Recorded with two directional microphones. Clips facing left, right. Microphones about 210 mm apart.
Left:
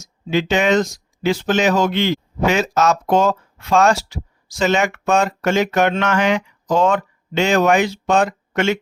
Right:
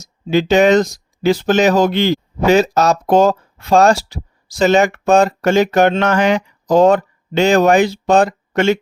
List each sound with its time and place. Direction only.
0.0 s speech: 40° right (ahead or behind)